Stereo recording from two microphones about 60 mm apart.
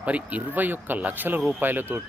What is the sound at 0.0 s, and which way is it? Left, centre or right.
Speech, right.